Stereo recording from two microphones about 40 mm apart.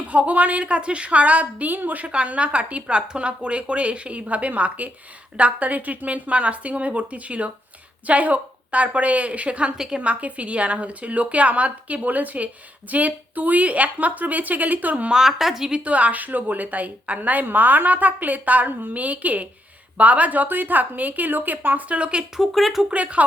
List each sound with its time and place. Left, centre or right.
0.1 s a woman's voice: right
1.7 s a woman's voice: right
2.0 s a woman's voice: right
9.7 s a woman's voice: centre
10.0 s a woman's voice: right
15.1 s a woman's voice: centre
15.8 s a woman's voice: right
21.8 s a woman's voice: right
22.4 s speech: centre
22.9 s a woman's voice: right